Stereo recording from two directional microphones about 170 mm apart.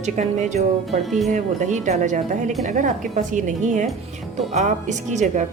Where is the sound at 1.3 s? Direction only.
45° right (ahead or behind).